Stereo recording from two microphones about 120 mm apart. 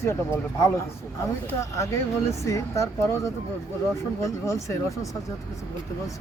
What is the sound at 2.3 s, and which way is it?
Speech, 25° left (ahead or behind).